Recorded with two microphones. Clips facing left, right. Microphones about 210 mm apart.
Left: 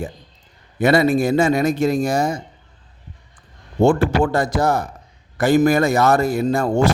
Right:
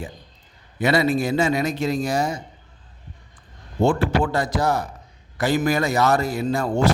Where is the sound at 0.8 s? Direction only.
50° left (ahead or behind).